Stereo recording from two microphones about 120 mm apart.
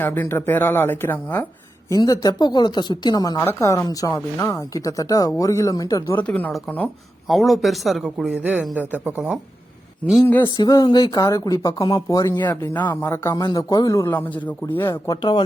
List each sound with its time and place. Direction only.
0.0 s speech: 15° left (ahead or behind)
1.9 s speech: 30° left (ahead or behind)
6.1 s speech: 15° left (ahead or behind)
7.3 s speech: centre (ahead or behind)
10.0 s speech: 10° left (ahead or behind)
10.4 s speech: 30° left (ahead or behind)
12.5 s speech: 15° left (ahead or behind)
13.3 s speech: 35° left (ahead or behind)
14.1 s speech: 15° left (ahead or behind)
15.0 s speech: 35° left (ahead or behind)